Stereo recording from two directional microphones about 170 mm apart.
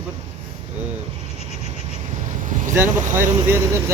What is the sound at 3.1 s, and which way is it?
Speech, 15° right (ahead or behind).